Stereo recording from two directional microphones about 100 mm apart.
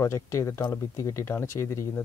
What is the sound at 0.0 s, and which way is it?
Speech, 30° left (ahead or behind).